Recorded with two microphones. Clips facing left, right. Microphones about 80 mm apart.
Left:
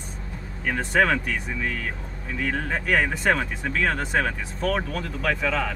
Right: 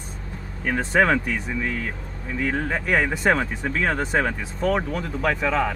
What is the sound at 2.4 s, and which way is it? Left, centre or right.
Speech, right.